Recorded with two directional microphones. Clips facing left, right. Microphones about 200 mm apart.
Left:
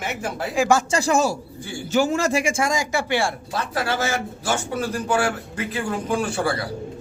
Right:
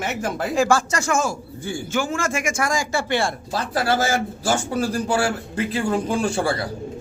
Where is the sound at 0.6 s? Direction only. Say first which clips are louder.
Left 1 dB; 20° left (ahead or behind).